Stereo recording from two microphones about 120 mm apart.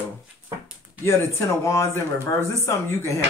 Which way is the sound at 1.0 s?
25° left (ahead or behind).